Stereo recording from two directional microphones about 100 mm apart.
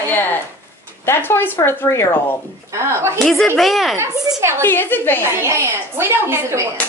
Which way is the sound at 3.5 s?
Centre (ahead or behind).